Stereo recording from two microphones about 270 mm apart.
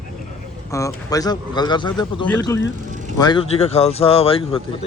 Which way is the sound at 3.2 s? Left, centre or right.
Centre.